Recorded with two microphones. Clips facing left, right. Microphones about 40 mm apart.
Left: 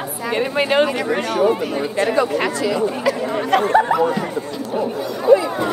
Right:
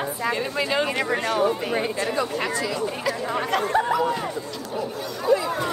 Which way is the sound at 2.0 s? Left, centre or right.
Left.